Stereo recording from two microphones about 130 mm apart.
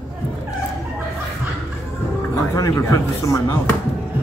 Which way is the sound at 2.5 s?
25° left (ahead or behind).